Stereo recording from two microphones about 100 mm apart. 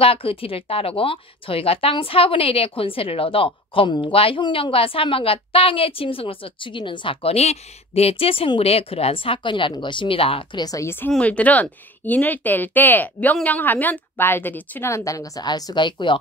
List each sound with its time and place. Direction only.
0.0 s speech: 65° left (ahead or behind)
8.5 s speech: 80° left
10.6 s a woman's voice: 35° left (ahead or behind)
11.1 s speech: 10° left (ahead or behind); by 16.2 s 50° left (ahead or behind)